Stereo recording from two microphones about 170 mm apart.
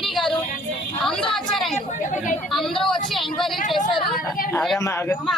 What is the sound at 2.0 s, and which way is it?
Chatter, 50° left (ahead or behind).